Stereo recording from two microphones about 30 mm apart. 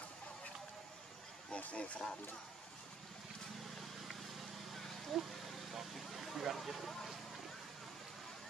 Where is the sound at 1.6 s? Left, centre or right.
Left.